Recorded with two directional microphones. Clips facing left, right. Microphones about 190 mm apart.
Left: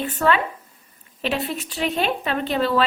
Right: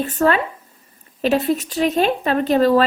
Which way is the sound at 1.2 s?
40° right (ahead or behind).